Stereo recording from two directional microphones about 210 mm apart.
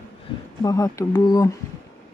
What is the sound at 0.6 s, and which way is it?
Speech, 15° left (ahead or behind).